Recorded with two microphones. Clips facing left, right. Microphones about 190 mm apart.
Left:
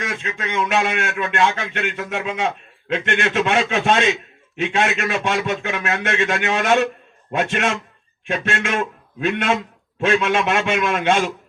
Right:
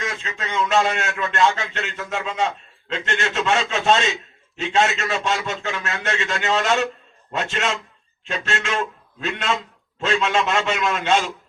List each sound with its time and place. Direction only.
0.0 s a man's voice: 60° left (ahead or behind)